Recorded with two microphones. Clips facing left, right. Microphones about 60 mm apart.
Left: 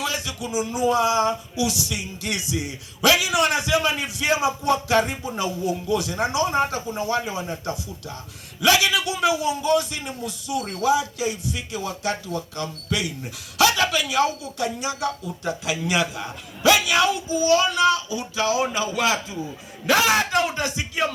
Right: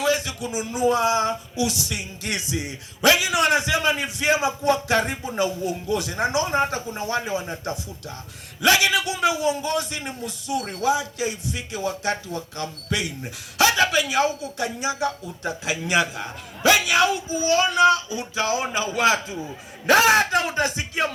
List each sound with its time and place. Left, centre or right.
0.0 s speech: right